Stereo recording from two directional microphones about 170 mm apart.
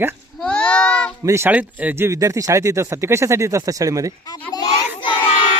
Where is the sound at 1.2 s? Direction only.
15° right (ahead or behind).